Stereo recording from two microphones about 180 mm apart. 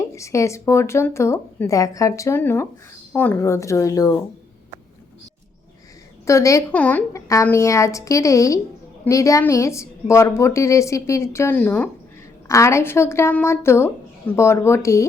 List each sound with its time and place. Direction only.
0.1 s a woman's voice: 15° left (ahead or behind)
6.2 s a woman's voice: 15° left (ahead or behind)